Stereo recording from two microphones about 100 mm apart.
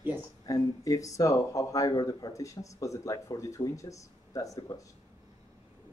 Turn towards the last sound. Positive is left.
turn(degrees=35)  # may be behind; listen again after turning